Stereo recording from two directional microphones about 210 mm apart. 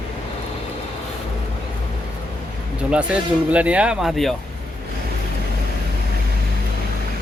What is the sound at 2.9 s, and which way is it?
Speech, 5° right (ahead or behind).